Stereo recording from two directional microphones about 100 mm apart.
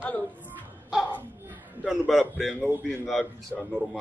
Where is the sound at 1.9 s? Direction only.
Centre (ahead or behind).